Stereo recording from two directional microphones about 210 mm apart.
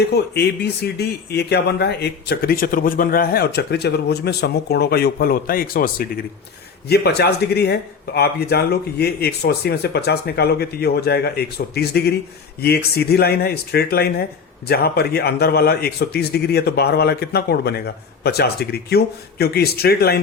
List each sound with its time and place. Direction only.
0.0 s speech: 50° left (ahead or behind)